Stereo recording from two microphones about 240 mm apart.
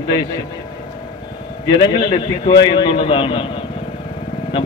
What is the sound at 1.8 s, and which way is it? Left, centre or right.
A man's voice, centre.